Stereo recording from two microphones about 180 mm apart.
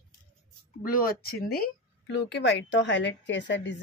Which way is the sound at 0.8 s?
55° left (ahead or behind).